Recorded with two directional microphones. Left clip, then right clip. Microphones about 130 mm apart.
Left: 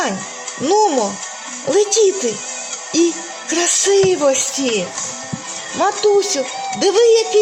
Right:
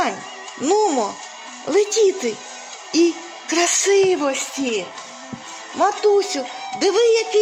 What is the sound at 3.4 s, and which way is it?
Music, 50° right (ahead or behind).